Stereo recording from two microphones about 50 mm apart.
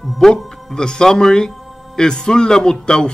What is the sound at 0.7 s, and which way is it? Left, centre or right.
Speech, centre.